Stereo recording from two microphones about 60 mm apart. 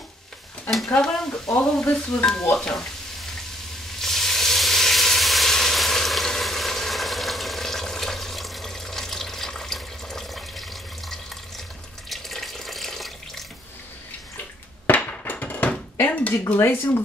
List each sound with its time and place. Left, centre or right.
1.6 s stir: centre
2.5 s frying: centre
4.0 s sizzle: centre
12.1 s water tap: centre
14.9 s a sound: left
16.5 s speech: left